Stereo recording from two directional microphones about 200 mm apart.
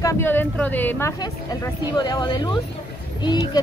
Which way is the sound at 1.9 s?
20° left (ahead or behind).